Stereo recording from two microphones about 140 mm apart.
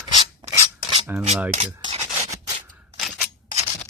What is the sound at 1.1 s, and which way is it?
Speech, 15° right (ahead or behind).